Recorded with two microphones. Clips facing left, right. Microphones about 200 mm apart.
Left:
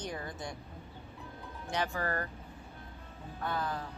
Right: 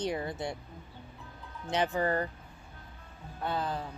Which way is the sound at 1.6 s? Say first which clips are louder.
Right 5 dB; 20° right (ahead or behind).